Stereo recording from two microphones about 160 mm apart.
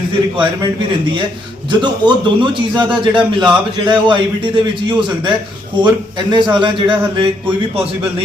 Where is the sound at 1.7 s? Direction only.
30° right (ahead or behind).